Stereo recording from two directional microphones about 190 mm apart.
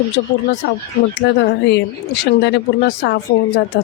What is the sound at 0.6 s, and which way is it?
Speech, 65° left (ahead or behind).